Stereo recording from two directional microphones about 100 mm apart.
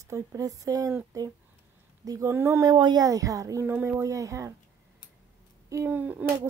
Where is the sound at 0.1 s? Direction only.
35° right (ahead or behind).